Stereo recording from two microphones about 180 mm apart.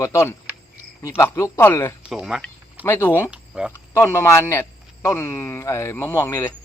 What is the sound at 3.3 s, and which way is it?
Cricket, 5° right (ahead or behind).